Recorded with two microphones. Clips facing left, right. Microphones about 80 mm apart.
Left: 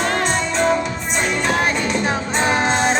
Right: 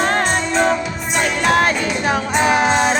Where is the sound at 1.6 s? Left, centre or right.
Right.